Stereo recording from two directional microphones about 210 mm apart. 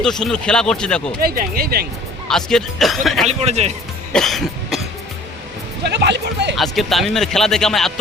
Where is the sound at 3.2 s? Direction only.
30° right (ahead or behind).